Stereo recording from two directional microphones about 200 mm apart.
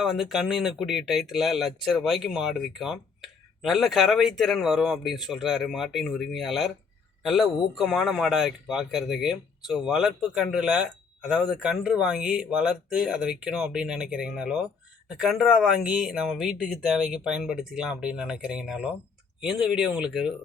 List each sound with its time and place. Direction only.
0.0 s speech: centre (ahead or behind)